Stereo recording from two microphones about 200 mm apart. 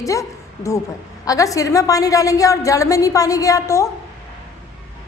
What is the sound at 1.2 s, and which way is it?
A woman's voice, 15° left (ahead or behind).